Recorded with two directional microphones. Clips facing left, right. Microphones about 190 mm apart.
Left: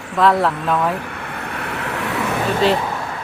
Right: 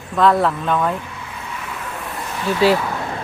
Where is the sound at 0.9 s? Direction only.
65° left (ahead or behind).